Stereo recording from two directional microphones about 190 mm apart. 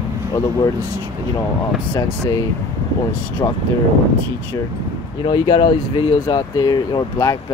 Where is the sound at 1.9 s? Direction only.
15° left (ahead or behind).